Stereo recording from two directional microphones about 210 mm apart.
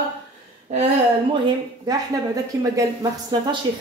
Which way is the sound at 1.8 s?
15° right (ahead or behind).